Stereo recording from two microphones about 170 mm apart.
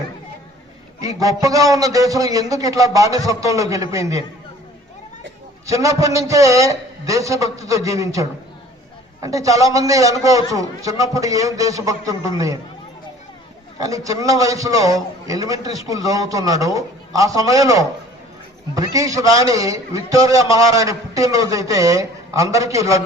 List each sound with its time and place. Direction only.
1.0 s a man's voice: 20° right (ahead or behind)
5.6 s a man's voice: 20° right (ahead or behind)
13.8 s a man's voice: 20° right (ahead or behind)